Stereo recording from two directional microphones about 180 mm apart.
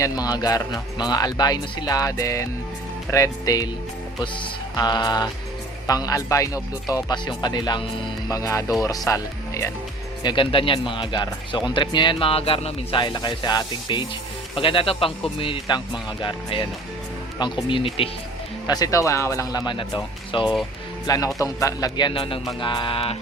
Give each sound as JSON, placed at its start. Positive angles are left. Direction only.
{"t": 0.0, "sound": "speech", "side_deg": 20}
{"t": 4.7, "sound": "speech", "side_deg": 25}
{"t": 10.2, "sound": "speech", "side_deg": 30}
{"t": 18.7, "sound": "speech", "side_deg": 20}